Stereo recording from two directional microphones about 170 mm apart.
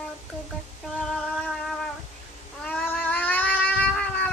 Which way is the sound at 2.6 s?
10° left (ahead or behind).